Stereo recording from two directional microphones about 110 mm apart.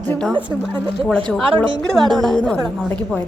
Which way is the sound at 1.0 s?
10° left (ahead or behind).